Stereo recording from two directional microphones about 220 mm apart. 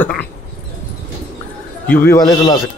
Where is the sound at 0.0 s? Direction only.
5° left (ahead or behind).